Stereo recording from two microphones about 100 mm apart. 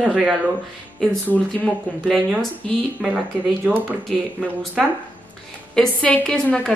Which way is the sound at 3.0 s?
10° right (ahead or behind).